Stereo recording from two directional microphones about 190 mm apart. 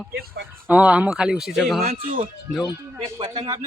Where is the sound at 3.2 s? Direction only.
20° right (ahead or behind).